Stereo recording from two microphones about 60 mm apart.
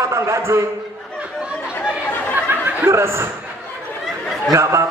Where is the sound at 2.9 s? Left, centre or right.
Right.